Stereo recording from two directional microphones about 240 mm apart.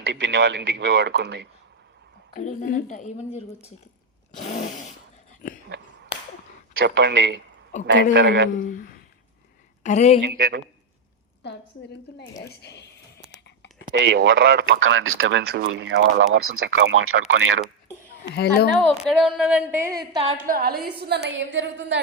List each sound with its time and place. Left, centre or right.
0.0 s speech: right
2.3 s a woman's voice: left
4.4 s a sound: left
5.6 s a sound: right
6.8 s speech: right
7.7 s speech: left
8.1 s speech: right
8.5 s a woman's voice: left
10.2 s speech: right
11.4 s a woman's voice: left
13.8 s speech: right
18.8 s a sound: centre; by 20.4 s right
20.5 s a woman's voice: right